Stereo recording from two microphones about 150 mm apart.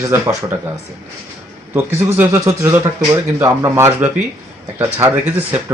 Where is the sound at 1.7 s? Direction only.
15° right (ahead or behind).